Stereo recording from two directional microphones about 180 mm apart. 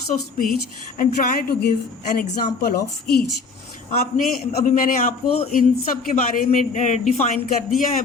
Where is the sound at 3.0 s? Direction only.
60° left (ahead or behind).